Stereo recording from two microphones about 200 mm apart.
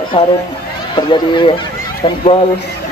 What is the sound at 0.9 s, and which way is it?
Speech, 25° left (ahead or behind).